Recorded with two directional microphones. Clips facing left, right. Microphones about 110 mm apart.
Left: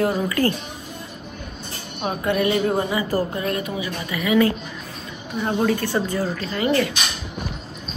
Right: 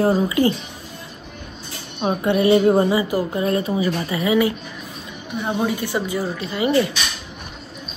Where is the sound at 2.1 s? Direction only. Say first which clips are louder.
Right 5 dB; 25° right (ahead or behind).